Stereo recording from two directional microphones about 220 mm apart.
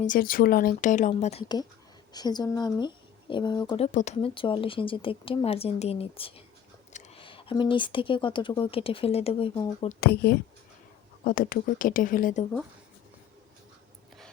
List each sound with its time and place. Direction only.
0.0 s speech: 40° left (ahead or behind); by 3.8 s 20° left (ahead or behind)
3.9 s speech: 30° left (ahead or behind)
10.0 s speech: 45° left (ahead or behind)